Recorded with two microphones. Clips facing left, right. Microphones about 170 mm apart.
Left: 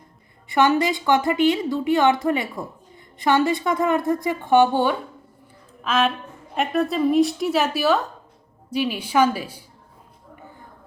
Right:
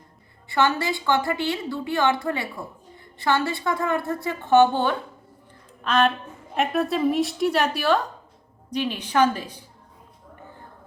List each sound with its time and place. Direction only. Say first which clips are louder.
0.4 s a woman's voice: left 4 dB; 20° left (ahead or behind)